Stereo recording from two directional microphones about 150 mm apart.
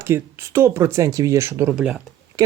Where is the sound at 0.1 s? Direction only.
15° right (ahead or behind).